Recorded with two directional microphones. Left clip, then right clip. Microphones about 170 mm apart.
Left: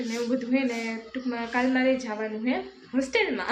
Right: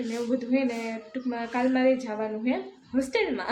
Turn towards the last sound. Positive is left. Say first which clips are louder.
# left 1 dB
turn(degrees=-10)  # may be behind; listen again after turning